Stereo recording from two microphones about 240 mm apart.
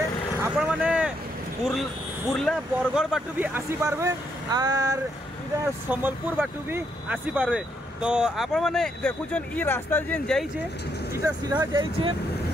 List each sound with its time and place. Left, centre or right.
0.4 s vehicle: centre
1.6 s speech: centre
11.1 s speech: centre